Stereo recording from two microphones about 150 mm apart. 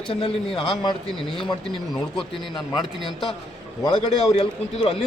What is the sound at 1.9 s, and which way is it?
Speech, 5° left (ahead or behind).